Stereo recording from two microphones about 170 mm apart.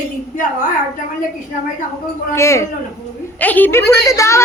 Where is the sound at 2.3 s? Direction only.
15° left (ahead or behind).